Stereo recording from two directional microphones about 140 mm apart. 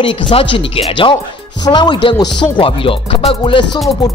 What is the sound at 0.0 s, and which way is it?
Speech, 40° left (ahead or behind).